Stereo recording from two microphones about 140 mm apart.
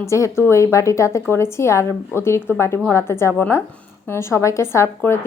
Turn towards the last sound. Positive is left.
turn(degrees=20)  # may be behind; listen again after turning